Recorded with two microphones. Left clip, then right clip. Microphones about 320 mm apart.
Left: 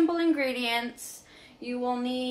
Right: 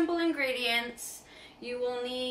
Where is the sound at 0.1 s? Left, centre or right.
Centre.